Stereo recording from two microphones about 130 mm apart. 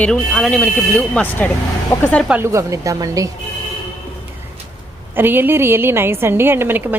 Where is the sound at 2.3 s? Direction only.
20° right (ahead or behind).